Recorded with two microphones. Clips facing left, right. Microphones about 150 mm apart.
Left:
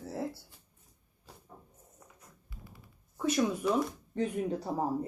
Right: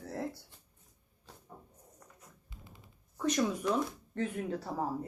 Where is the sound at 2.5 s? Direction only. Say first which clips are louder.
Left 4 dB; 20° right (ahead or behind).